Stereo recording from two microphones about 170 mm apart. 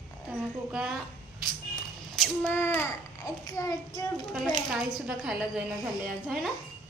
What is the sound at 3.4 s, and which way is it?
Child singing, 20° left (ahead or behind).